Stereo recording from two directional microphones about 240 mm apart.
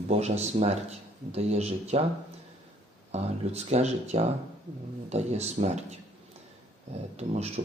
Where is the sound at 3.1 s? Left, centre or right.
Right.